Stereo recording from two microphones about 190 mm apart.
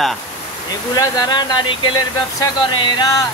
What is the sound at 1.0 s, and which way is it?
Speech, 20° left (ahead or behind).